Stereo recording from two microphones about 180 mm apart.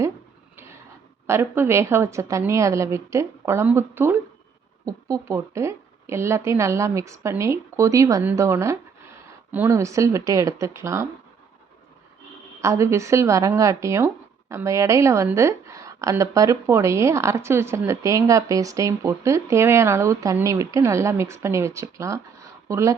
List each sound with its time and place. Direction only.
0.5 s a sound: 15° right (ahead or behind)
1.3 s a woman's voice: 15° right (ahead or behind)
12.6 s a woman's voice: 15° right (ahead or behind)